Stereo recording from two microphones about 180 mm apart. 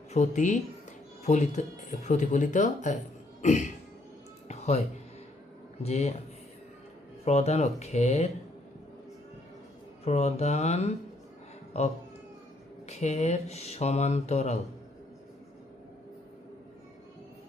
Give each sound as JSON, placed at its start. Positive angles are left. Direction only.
{"t": 0.1, "sound": "speech", "side_deg": 40}
{"t": 4.4, "sound": "music", "side_deg": 35}
{"t": 5.8, "sound": "speech", "side_deg": 40}
{"t": 7.3, "sound": "speech", "side_deg": 35}
{"t": 10.0, "sound": "speech", "side_deg": 35}